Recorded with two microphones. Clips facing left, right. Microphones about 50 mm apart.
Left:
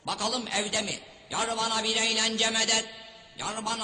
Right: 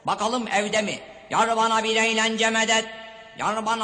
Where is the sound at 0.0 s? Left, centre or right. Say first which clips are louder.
Right 7 dB; right.